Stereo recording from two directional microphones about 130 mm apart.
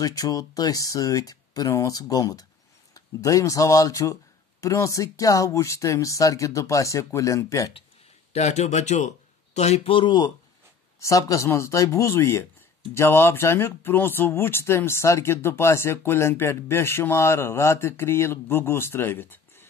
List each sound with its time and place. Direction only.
0.0 s speech: 25° left (ahead or behind)
8.3 s speech: 60° left (ahead or behind)
9.9 s speech: 35° left (ahead or behind)
11.0 s speech: 25° left (ahead or behind)